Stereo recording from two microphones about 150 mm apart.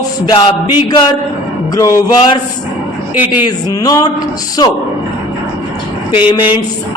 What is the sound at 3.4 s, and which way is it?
Mantra, 25° left (ahead or behind).